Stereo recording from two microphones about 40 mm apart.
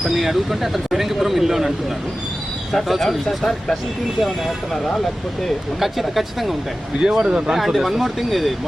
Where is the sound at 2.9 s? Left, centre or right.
Centre.